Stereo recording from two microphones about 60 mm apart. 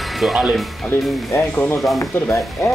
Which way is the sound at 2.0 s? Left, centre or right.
Left.